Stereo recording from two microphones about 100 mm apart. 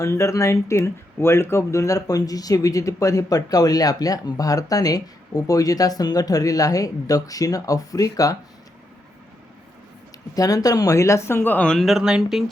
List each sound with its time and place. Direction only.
0.0 s speech: 30° left (ahead or behind)
10.3 s speech: 35° left (ahead or behind); by 12.5 s 5° right (ahead or behind)